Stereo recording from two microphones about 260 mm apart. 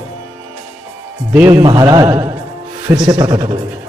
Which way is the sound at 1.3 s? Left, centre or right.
Centre.